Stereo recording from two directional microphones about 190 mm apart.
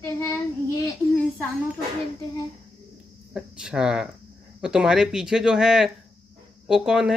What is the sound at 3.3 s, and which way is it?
Speech, 5° right (ahead or behind).